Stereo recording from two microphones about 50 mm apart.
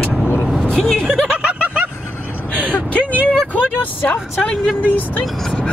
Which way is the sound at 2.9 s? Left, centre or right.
Right.